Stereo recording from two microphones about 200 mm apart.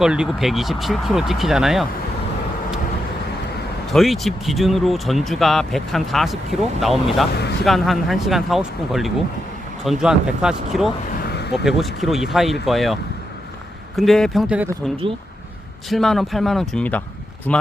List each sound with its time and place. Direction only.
0.0 s speech: 5° right (ahead or behind)
3.9 s speech: centre (ahead or behind)
11.2 s a sound: 55° left (ahead or behind)
11.6 s speech: centre (ahead or behind)
15.9 s speech: centre (ahead or behind)